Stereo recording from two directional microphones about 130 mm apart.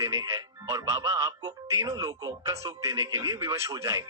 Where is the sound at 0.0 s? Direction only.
20° right (ahead or behind).